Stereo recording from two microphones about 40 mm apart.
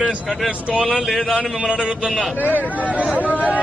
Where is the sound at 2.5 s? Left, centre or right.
Left.